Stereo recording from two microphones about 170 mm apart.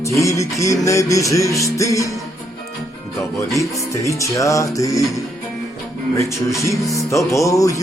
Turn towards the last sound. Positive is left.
turn(degrees=20)  # may be behind; listen again after turning